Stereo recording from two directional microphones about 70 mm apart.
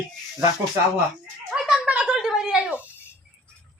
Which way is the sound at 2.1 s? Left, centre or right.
Centre.